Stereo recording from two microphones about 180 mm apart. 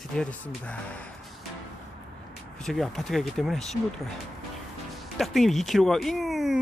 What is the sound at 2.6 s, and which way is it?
Speech, centre (ahead or behind).